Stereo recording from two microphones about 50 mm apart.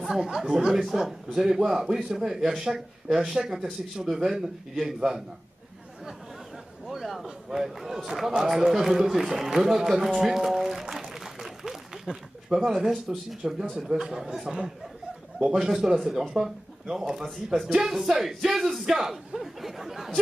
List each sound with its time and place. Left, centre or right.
0.0 s speech: centre
6.9 s a sound: centre
7.2 s a man's voice: centre